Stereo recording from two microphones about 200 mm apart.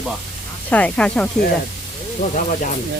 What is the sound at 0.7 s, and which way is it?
Speech, 5° left (ahead or behind).